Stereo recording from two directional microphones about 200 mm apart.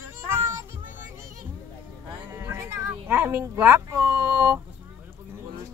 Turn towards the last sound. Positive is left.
turn(degrees=-10)  # may be behind; listen again after turning